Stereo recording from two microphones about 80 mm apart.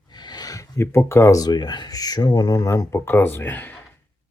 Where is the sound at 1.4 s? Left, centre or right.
Left.